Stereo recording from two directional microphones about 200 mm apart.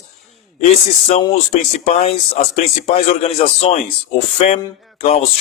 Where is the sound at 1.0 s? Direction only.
30° left (ahead or behind).